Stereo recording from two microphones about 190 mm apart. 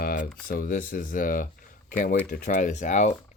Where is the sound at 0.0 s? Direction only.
50° left (ahead or behind).